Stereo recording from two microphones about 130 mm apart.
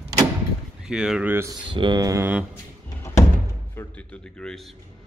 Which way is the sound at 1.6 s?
40° right (ahead or behind).